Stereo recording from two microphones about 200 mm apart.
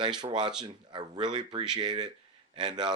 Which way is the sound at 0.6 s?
20° right (ahead or behind).